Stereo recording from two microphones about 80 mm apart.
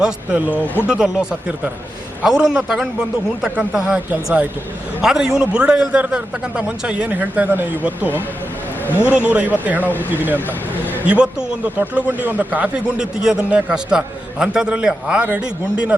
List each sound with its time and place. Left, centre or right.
0.0 s speech: centre
8.8 s a man's voice: left
9.1 s speech: centre
9.8 s speech: left
10.1 s speech: right
11.0 s speech: centre